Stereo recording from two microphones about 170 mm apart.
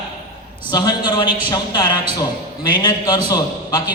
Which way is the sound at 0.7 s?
25° left (ahead or behind).